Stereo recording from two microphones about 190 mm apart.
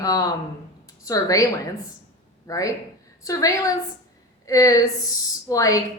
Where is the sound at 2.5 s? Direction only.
15° left (ahead or behind).